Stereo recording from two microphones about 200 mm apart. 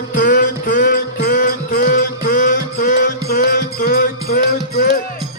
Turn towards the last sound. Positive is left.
turn(degrees=45)  # may be behind; listen again after turning